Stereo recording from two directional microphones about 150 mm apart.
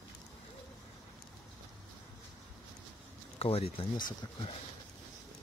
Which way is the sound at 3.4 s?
40° left (ahead or behind).